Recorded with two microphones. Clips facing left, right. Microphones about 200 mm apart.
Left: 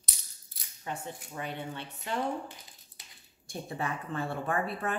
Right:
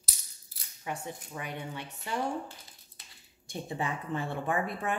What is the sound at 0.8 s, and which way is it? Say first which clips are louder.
Speech: right 1 dB; 15° right (ahead or behind).